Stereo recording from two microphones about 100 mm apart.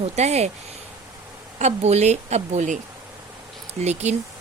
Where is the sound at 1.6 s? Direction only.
90° right.